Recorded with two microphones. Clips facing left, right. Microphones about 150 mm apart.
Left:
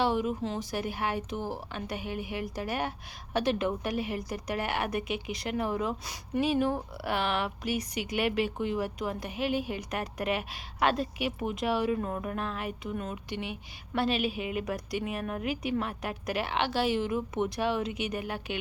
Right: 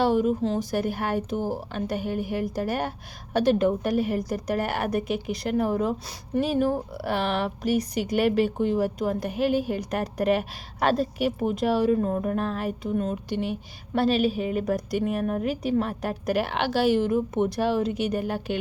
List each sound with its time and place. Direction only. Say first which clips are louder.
0.0 s a woman's voice: right 6 dB; 45° right (ahead or behind)